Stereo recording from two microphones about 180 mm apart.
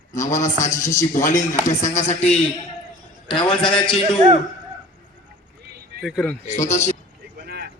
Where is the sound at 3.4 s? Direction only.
25° left (ahead or behind).